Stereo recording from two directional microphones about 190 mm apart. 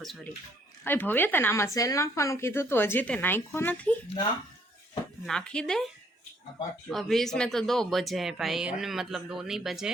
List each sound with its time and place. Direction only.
0.9 s speech: 10° left (ahead or behind)
5.2 s speech: 5° left (ahead or behind)
6.9 s speech: centre (ahead or behind)